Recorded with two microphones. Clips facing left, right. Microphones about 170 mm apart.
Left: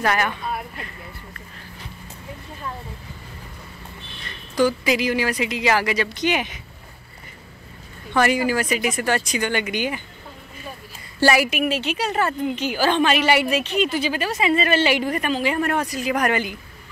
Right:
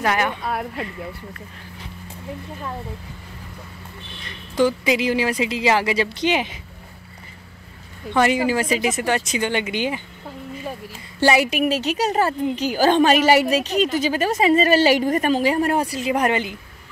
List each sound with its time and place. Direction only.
0.0 s a woman's voice: 15° right (ahead or behind)
0.5 s speech: 80° right
4.6 s speech: 25° right (ahead or behind)
8.1 s speech: 20° right (ahead or behind)
11.1 s speech: 20° right (ahead or behind)
11.5 s a woman's voice: 35° right (ahead or behind)